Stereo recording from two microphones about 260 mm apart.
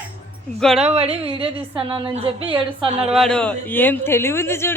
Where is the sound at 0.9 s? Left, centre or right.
Right.